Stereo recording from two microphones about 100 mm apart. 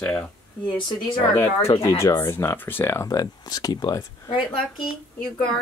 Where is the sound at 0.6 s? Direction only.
50° left (ahead or behind).